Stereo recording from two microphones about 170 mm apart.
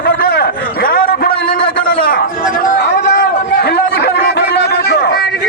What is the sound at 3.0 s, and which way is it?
Chatter, 65° left (ahead or behind).